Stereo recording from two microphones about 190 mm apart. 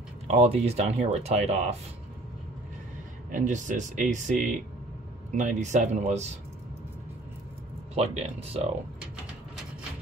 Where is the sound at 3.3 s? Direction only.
40° right (ahead or behind).